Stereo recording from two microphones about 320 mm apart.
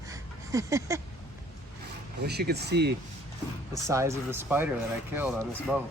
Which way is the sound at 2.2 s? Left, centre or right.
Right.